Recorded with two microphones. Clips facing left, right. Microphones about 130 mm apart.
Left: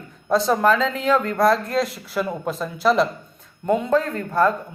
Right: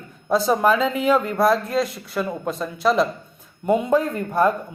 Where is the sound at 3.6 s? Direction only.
10° right (ahead or behind).